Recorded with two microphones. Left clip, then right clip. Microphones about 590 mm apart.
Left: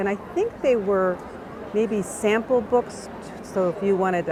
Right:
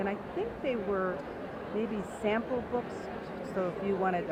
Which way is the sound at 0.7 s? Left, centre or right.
Left.